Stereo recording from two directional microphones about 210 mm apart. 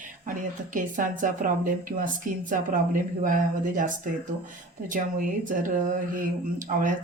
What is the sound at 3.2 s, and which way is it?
Speech, 40° right (ahead or behind).